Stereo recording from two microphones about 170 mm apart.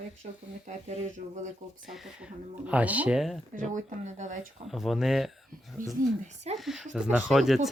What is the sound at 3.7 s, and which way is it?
Speech, 45° right (ahead or behind).